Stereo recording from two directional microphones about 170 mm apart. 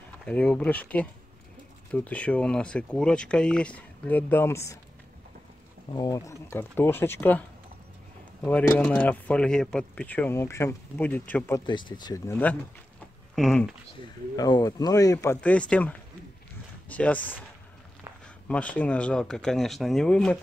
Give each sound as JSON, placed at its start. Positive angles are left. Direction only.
{"t": 0.2, "sound": "speech", "side_deg": 5}
{"t": 5.9, "sound": "speech", "side_deg": 20}
{"t": 11.6, "sound": "speech", "side_deg": 25}
{"t": 12.3, "sound": "speech", "side_deg": 10}
{"t": 14.3, "sound": "speech", "side_deg": 20}
{"t": 15.4, "sound": "speech", "side_deg": 5}
{"t": 18.5, "sound": "speech", "side_deg": 10}